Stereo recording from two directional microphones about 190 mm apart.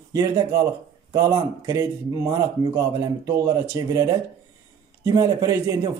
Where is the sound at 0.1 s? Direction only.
15° right (ahead or behind).